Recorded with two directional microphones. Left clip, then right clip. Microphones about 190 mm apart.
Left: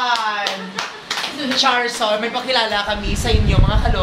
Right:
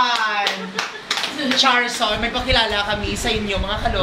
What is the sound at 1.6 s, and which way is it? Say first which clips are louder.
A woman's voice: even; 20° left (ahead or behind).